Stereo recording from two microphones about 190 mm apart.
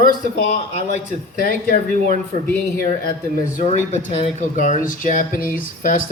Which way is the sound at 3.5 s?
35° left (ahead or behind).